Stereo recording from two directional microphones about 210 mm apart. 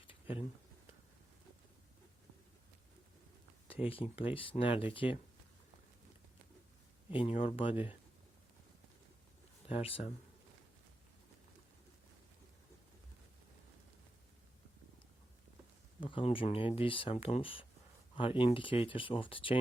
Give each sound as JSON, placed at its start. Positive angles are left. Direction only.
{"t": 0.1, "sound": "a sound", "side_deg": 25}
{"t": 3.8, "sound": "speech", "side_deg": 25}
{"t": 7.1, "sound": "speech", "side_deg": 25}
{"t": 9.6, "sound": "speech", "side_deg": 25}
{"t": 16.0, "sound": "speech", "side_deg": 25}